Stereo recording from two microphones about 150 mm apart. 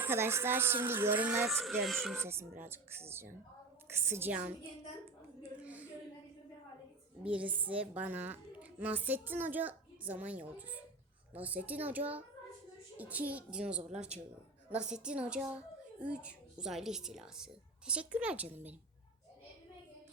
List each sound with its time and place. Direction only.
0.0 s a woman's voice: 15° right (ahead or behind)
1.5 s speech: centre (ahead or behind)
2.1 s a woman's voice: 15° right (ahead or behind)
5.4 s a sound: 10° right (ahead or behind)
7.3 s a woman's voice: 10° right (ahead or behind)